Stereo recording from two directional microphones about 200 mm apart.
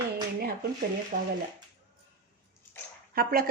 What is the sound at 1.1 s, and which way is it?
Speech, 40° right (ahead or behind).